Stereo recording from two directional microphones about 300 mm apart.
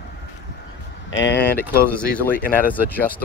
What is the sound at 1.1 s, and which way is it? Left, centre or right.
Speech, left.